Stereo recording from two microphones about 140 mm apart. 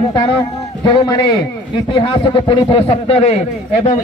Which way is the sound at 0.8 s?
30° left (ahead or behind).